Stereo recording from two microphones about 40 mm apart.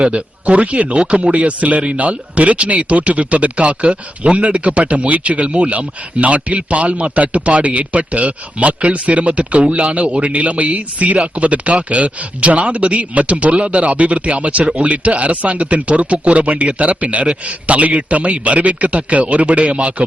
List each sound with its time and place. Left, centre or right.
0.0 s speech: right